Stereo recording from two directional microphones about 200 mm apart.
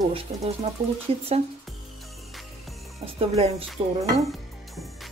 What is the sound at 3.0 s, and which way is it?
Speech, 30° right (ahead or behind).